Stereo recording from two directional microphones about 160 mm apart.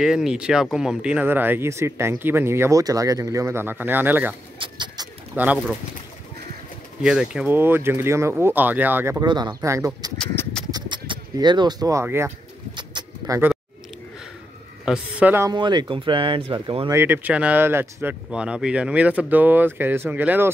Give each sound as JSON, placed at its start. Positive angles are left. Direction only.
{"t": 0.0, "sound": "speech", "side_deg": -5}
{"t": 4.6, "sound": "a sound", "side_deg": -30}
{"t": 5.3, "sound": "speech", "side_deg": -10}
{"t": 7.0, "sound": "speech", "side_deg": -5}
{"t": 9.2, "sound": "speech", "side_deg": -25}
{"t": 10.1, "sound": "livestock", "side_deg": 5}
{"t": 10.7, "sound": "a sound", "side_deg": -25}
{"t": 12.7, "sound": "bird", "side_deg": -30}
{"t": 14.9, "sound": "speech", "side_deg": -10}
{"t": 15.5, "sound": "speech", "side_deg": -30}
{"t": 16.9, "sound": "speech", "side_deg": -10}